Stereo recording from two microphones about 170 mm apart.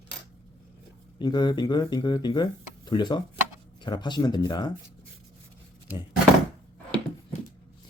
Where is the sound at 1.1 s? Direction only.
25° left (ahead or behind).